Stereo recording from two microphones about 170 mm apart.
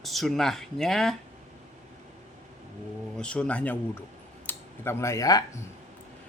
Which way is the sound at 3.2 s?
5° left (ahead or behind).